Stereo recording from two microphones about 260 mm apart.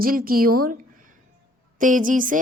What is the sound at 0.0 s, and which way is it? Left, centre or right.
A woman's voice, right.